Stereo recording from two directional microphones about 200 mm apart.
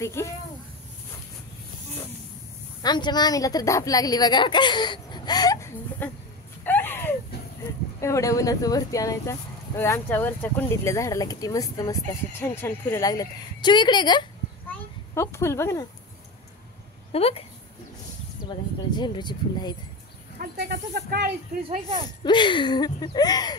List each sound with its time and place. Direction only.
0.0 s speech: 15° left (ahead or behind)
2.8 s a woman's voice: 20° left (ahead or behind)
6.6 s a sound: 10° left (ahead or behind)
8.0 s speech: 15° left (ahead or behind)
17.1 s a woman's voice: 30° left (ahead or behind)
18.9 s a woman's voice: 20° left (ahead or behind)
20.3 s speech: 50° right (ahead or behind)
21.6 s speech: 25° right (ahead or behind)
22.2 s a woman's voice: 25° left (ahead or behind)